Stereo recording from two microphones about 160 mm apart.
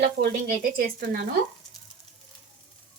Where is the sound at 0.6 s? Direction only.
60° right (ahead or behind).